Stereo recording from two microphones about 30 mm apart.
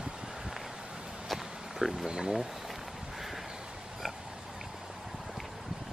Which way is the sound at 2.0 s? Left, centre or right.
Right.